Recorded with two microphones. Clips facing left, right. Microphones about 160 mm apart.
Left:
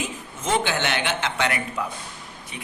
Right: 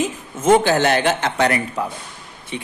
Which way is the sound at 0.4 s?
45° right (ahead or behind).